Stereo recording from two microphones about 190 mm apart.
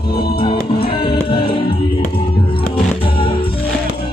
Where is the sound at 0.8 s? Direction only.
30° left (ahead or behind).